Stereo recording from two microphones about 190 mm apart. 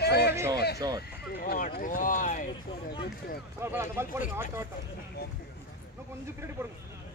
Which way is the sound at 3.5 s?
15° right (ahead or behind).